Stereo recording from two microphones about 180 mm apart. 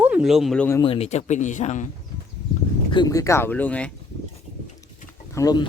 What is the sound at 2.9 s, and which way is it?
Speech, 20° left (ahead or behind).